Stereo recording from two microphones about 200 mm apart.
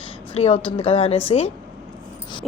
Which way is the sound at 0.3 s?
30° left (ahead or behind).